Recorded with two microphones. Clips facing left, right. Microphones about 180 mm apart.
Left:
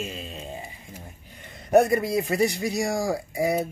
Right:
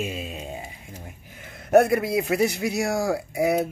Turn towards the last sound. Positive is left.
turn(degrees=-5)  # may be behind; listen again after turning